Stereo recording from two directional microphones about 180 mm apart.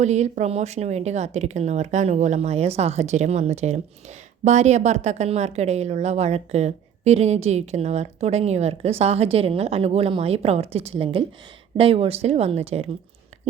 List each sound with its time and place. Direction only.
0.0 s speech: 40° right (ahead or behind)